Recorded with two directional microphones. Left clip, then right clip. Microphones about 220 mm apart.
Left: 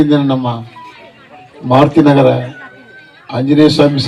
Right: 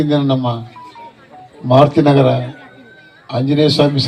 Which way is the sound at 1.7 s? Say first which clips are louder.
Left 2 dB; 35° left (ahead or behind).